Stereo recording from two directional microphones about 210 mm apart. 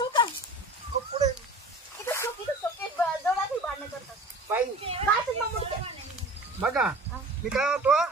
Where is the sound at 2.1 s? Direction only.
10° left (ahead or behind).